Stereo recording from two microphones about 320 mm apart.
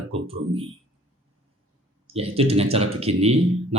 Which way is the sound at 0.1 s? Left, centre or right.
Centre.